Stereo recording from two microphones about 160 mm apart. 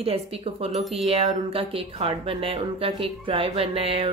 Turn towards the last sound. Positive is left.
turn(degrees=-35)  # may be behind; listen again after turning